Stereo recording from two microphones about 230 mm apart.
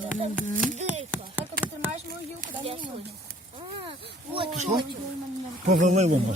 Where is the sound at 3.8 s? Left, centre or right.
Right.